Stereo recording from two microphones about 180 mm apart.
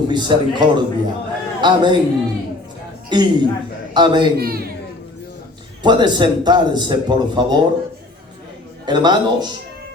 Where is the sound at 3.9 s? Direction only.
25° right (ahead or behind).